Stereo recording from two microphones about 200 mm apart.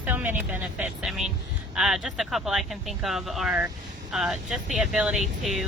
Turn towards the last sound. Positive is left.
turn(degrees=0)  # may be behind; listen again after turning